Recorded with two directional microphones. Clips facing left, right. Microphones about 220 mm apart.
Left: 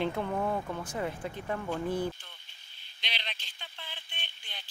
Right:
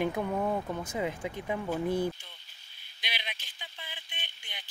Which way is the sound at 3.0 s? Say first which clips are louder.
Even; 10° right (ahead or behind).